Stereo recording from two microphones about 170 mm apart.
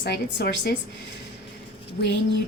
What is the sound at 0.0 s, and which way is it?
Speech, 85° left.